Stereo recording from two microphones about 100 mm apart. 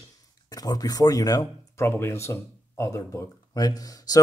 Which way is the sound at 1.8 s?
25° left (ahead or behind).